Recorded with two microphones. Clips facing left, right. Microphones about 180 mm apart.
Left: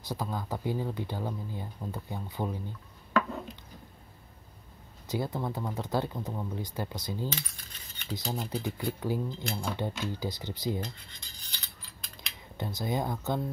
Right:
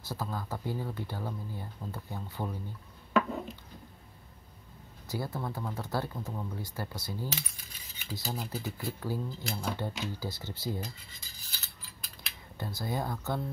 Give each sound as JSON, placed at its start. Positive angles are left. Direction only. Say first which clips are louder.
{"t": 0.0, "sound": "speech", "louder": "left 2 dB", "side_deg": 15}
{"t": 3.2, "sound": "a sound", "louder": "right 1 dB", "side_deg": -5}
{"t": 5.0, "sound": "speech", "louder": "left 4 dB", "side_deg": 20}
{"t": 7.2, "sound": "coin", "louder": "left 2 dB", "side_deg": -5}
{"t": 9.8, "sound": "speech", "louder": "left 3 dB", "side_deg": 20}
{"t": 10.8, "sound": "mechanisms", "louder": "left 3 dB", "side_deg": -5}
{"t": 12.5, "sound": "speech", "louder": "left 3 dB", "side_deg": 20}